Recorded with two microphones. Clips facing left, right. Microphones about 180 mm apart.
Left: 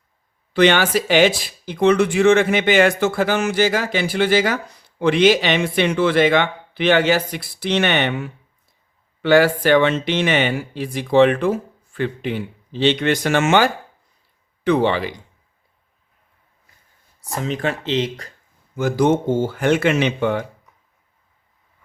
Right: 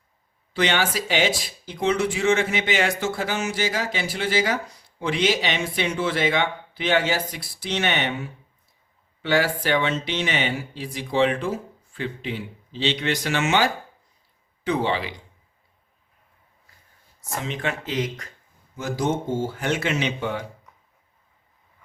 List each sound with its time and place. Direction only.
0.5 s speech: 65° left (ahead or behind)
14.6 s speech: 65° left (ahead or behind)
17.3 s speech: 40° left (ahead or behind)
18.8 s speech: 60° left (ahead or behind)